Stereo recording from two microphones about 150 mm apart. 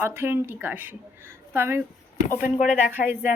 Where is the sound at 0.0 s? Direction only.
15° right (ahead or behind).